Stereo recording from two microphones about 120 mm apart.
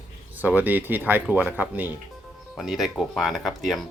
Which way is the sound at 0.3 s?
15° right (ahead or behind).